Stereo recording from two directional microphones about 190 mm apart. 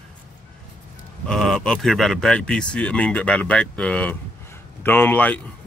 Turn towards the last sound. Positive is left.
turn(degrees=10)  # may be behind; listen again after turning